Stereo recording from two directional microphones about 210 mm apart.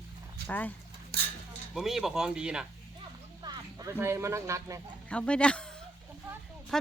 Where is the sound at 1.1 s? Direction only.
45° right (ahead or behind).